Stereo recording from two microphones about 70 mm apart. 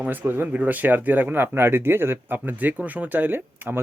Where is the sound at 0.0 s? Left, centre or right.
Right.